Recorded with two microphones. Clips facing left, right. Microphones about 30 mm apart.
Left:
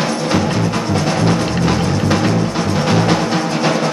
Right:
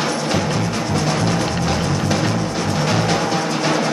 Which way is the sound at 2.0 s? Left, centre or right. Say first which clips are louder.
Left 4 dB; centre.